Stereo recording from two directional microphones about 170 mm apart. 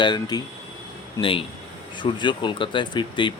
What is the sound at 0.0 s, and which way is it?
Speech, 25° left (ahead or behind).